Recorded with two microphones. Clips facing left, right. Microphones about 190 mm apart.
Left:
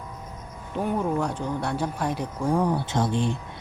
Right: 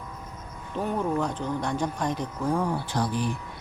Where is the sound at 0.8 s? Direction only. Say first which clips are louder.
Left 1 dB; 10° left (ahead or behind).